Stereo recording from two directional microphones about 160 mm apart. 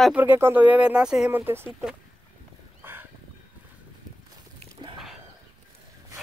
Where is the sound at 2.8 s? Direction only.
15° right (ahead or behind).